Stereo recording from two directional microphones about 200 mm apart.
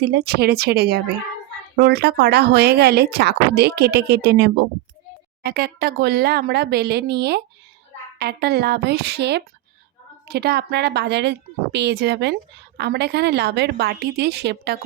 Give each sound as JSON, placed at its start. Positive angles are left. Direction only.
{"t": 0.0, "sound": "a woman's voice", "side_deg": -55}